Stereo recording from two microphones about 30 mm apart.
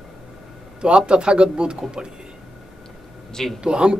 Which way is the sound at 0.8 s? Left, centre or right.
Right.